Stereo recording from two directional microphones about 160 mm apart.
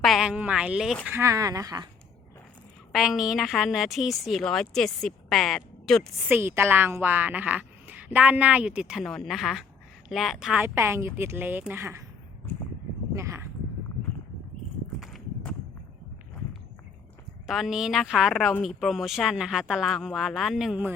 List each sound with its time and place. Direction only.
0.0 s speech: centre (ahead or behind)
1.0 s speech: 15° right (ahead or behind)
2.9 s speech: centre (ahead or behind)
6.2 s a woman's voice: 15° right (ahead or behind)
13.1 s a sound: 15° right (ahead or behind)
15.0 s walk: centre (ahead or behind)
17.4 s speech: centre (ahead or behind)